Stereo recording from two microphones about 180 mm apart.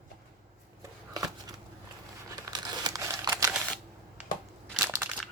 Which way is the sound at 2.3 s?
20° right (ahead or behind).